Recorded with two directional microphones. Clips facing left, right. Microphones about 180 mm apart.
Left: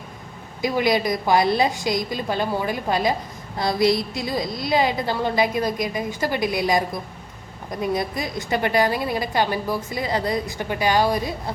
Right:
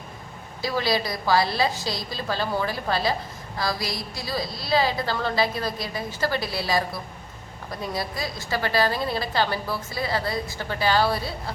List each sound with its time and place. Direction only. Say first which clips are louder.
0.6 s a woman's voice: left 5 dB; 20° left (ahead or behind)